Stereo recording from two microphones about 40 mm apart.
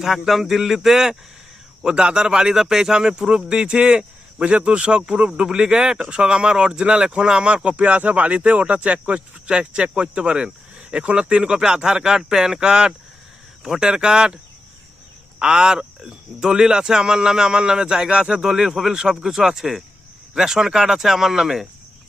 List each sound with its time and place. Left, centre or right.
0.0 s speech: centre
1.8 s speech: right
15.4 s speech: centre
18.5 s speech: centre